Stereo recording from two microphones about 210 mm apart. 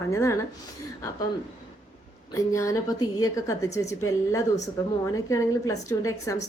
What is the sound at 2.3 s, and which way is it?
A woman's voice, 15° left (ahead or behind).